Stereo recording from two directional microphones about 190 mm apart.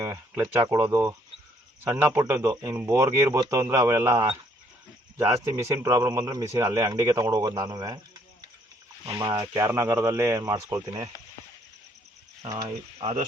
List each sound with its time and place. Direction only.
0.0 s speech: 10° right (ahead or behind)
9.0 s speech: 20° right (ahead or behind)
12.5 s speech: 20° right (ahead or behind)